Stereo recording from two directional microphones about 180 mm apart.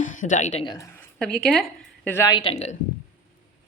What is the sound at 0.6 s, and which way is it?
Speech, 20° left (ahead or behind).